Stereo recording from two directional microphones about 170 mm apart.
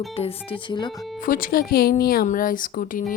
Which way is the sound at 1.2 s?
55° left (ahead or behind).